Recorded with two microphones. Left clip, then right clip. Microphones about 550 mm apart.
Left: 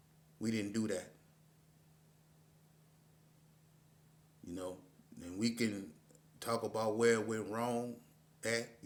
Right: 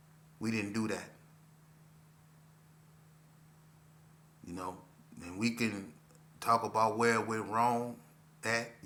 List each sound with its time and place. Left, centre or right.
0.4 s a man's voice: left
4.4 s a sound: left
6.4 s speech: left